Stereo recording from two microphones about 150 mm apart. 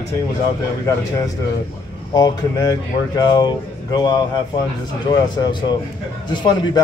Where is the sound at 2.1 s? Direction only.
25° left (ahead or behind).